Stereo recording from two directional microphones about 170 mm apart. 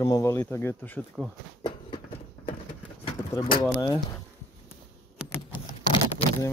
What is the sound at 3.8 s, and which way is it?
Speech, 20° left (ahead or behind).